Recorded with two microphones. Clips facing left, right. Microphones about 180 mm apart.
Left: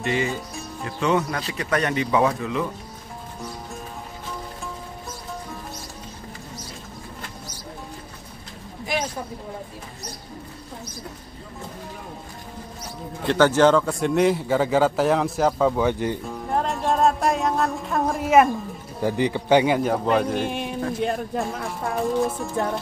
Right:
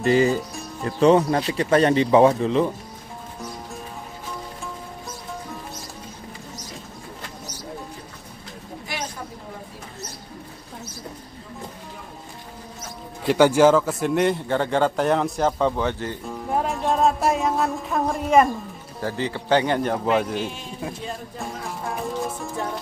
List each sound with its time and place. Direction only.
0.0 s speech: 35° right (ahead or behind)
13.3 s a man's voice: 10° right (ahead or behind); by 16.2 s 15° left (ahead or behind)
16.3 s music: centre (ahead or behind)
20.3 s a man's voice: 60° left (ahead or behind)
22.0 s a man's voice: centre (ahead or behind)